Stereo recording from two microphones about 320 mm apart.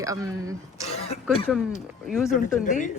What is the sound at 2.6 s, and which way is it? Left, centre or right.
Speech, left.